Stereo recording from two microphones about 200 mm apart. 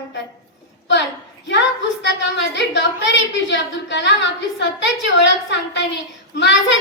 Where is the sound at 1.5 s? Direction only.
60° left (ahead or behind).